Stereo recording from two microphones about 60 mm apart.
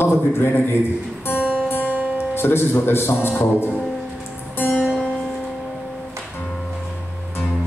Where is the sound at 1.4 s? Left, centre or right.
Right.